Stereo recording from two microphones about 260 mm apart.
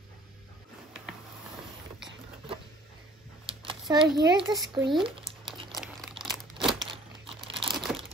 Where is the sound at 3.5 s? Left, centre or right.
Centre.